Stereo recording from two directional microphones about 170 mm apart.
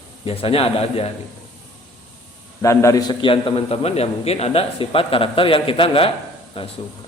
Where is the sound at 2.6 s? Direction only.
20° left (ahead or behind).